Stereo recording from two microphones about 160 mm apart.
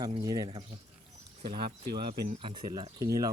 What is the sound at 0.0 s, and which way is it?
Speech, 25° right (ahead or behind).